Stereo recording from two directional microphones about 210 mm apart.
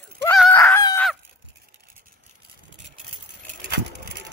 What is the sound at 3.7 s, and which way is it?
Vehicle, 55° right (ahead or behind).